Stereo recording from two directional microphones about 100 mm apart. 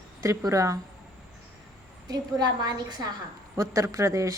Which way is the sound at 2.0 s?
40° right (ahead or behind).